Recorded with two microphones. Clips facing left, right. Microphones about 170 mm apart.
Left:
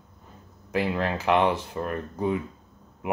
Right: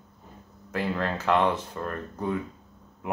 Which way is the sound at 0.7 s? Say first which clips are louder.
Left 2 dB; 15° left (ahead or behind).